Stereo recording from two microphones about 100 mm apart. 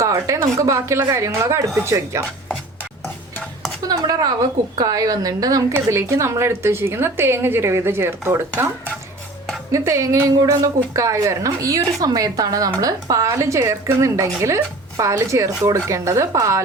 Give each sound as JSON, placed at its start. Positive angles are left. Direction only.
{"t": 0.0, "sound": "a woman's voice", "side_deg": -30}
{"t": 3.8, "sound": "a woman's voice", "side_deg": -40}
{"t": 9.7, "sound": "a woman's voice", "side_deg": -30}